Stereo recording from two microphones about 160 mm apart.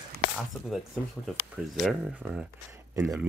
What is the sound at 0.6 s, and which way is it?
Speech, centre (ahead or behind).